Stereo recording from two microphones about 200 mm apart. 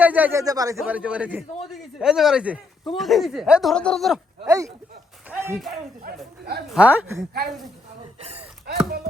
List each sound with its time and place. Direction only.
0.0 s speech: 10° right (ahead or behind)
0.8 s a man's voice: 5° right (ahead or behind)
4.4 s speech: 15° right (ahead or behind)
5.3 s a sound: 10° right (ahead or behind)
6.1 s speech: 50° right (ahead or behind)
6.7 s speech: 10° right (ahead or behind)
8.2 s speech: 30° right (ahead or behind)
8.6 s speech: 55° right (ahead or behind)